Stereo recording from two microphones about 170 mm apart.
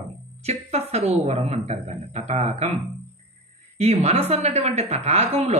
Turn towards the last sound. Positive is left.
turn(degrees=-40)  # may be behind; listen again after turning